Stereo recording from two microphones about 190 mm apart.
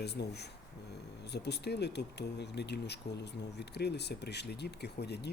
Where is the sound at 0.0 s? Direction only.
60° left (ahead or behind).